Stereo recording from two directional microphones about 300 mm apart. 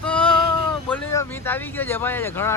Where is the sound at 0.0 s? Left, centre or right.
Centre.